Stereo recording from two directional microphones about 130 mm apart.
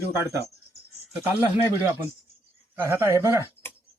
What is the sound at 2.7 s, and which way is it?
Speech, 20° right (ahead or behind).